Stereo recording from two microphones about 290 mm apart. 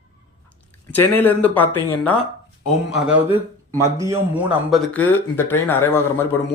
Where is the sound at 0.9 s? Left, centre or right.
Centre.